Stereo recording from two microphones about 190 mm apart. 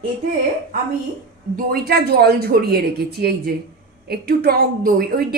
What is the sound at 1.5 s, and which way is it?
A woman's voice, 55° right (ahead or behind).